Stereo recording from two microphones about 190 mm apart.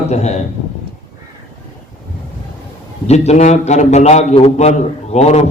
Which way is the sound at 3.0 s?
35° left (ahead or behind).